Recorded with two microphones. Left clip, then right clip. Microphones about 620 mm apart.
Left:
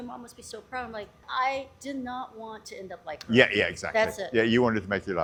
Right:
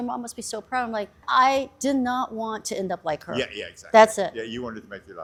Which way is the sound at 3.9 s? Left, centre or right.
Right.